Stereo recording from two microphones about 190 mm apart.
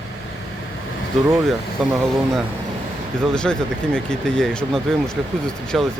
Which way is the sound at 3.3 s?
5° left (ahead or behind).